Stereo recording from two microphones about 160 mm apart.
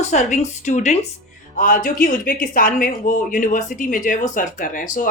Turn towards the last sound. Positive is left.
turn(degrees=55)  # may be behind; listen again after turning